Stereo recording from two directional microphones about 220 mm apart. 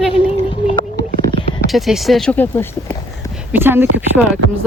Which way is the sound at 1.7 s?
Centre (ahead or behind).